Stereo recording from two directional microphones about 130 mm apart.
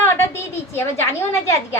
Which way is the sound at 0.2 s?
20° left (ahead or behind).